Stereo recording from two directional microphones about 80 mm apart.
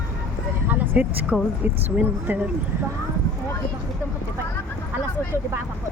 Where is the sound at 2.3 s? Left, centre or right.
Right.